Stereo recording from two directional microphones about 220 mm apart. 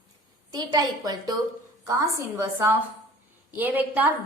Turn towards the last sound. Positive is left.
turn(degrees=-10)  # may be behind; listen again after turning